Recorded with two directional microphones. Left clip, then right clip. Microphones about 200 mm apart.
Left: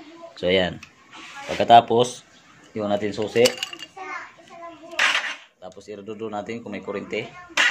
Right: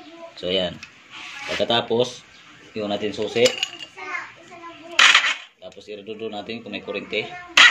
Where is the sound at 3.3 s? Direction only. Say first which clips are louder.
Even; 65° left (ahead or behind).